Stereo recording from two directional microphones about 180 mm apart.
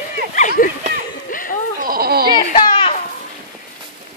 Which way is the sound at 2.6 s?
30° left (ahead or behind).